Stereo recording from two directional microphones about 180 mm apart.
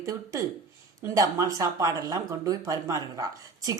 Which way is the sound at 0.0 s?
20° right (ahead or behind).